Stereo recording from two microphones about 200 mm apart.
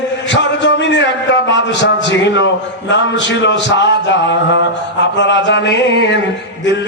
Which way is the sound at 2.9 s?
65° left (ahead or behind).